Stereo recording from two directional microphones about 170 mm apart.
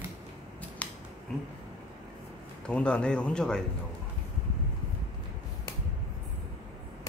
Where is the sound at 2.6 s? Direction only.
5° left (ahead or behind).